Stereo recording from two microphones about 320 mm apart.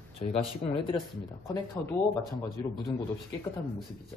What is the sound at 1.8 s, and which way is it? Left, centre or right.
Speech, centre.